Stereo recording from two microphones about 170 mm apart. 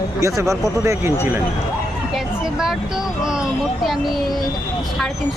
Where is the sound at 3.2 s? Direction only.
5° right (ahead or behind).